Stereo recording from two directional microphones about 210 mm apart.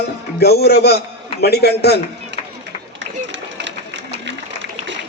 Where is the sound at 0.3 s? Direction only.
50° left (ahead or behind).